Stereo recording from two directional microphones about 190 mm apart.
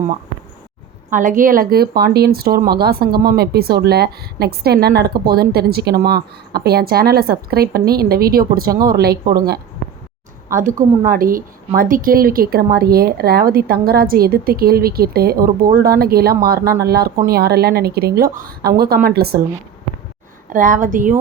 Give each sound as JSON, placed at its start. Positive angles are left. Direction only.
{"t": 1.1, "sound": "a woman's voice", "side_deg": -45}
{"t": 10.5, "sound": "a woman's voice", "side_deg": -45}
{"t": 20.5, "sound": "a woman's voice", "side_deg": -45}